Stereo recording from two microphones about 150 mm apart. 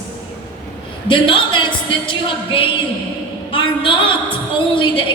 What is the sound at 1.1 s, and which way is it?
Speech, 35° left (ahead or behind).